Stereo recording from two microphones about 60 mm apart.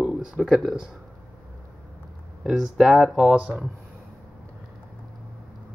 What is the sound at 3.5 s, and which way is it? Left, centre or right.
Speech, right.